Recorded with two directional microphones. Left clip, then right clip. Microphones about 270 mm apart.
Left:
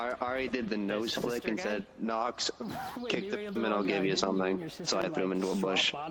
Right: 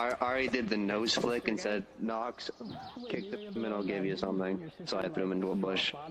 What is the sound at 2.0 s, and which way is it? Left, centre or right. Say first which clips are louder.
Speech: left 4 dB; centre.